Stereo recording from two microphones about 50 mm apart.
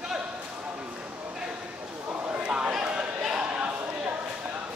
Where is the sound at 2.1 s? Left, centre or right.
Right.